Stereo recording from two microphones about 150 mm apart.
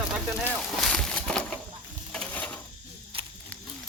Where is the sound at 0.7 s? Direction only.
Centre (ahead or behind).